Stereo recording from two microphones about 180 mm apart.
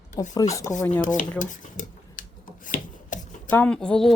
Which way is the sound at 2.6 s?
45° left (ahead or behind).